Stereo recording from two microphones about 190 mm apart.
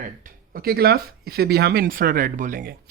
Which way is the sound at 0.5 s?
50° right (ahead or behind).